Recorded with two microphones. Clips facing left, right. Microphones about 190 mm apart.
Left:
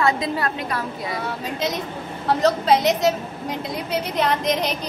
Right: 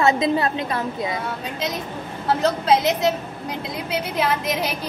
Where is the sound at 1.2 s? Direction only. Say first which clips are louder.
Left 2 dB; centre (ahead or behind).